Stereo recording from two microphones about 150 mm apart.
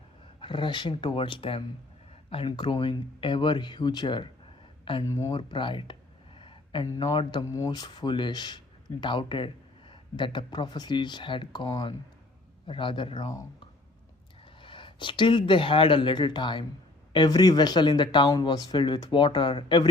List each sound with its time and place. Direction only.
0.3 s speech: 35° left (ahead or behind)
5.0 s speech: 20° left (ahead or behind)
5.3 s speech: 35° left (ahead or behind)
14.6 s speech: 35° left (ahead or behind)